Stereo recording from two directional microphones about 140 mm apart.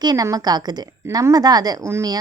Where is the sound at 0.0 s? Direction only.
25° right (ahead or behind).